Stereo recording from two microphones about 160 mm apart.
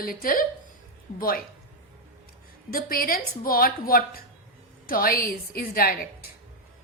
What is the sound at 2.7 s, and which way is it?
A woman's voice, 65° left (ahead or behind).